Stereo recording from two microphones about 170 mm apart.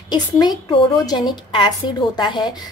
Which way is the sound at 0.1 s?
25° left (ahead or behind).